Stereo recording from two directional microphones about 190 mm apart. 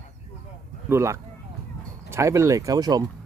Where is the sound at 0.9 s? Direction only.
15° right (ahead or behind).